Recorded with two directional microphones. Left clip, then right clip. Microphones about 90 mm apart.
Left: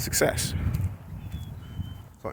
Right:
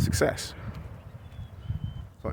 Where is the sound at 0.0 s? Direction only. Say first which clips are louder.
Left 2 dB; 30° right (ahead or behind).